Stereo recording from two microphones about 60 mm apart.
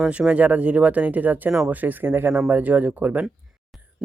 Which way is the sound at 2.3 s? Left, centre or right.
Right.